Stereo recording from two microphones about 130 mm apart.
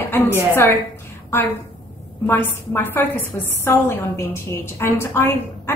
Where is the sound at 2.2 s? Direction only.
15° left (ahead or behind).